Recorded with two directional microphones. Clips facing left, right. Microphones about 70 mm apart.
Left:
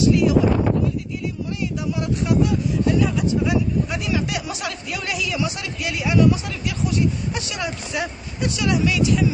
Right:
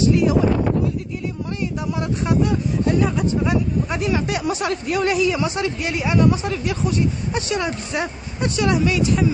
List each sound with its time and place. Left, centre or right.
0.0 s speech: right
2.0 s speech: right